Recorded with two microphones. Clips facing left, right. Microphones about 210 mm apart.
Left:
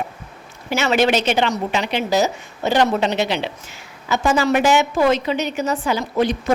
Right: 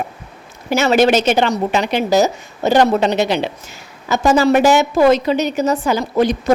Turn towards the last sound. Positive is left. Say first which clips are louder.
# right 4 dB
turn(degrees=-40)  # may be behind; listen again after turning